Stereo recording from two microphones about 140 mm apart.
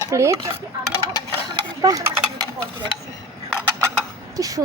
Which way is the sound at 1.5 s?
30° right (ahead or behind).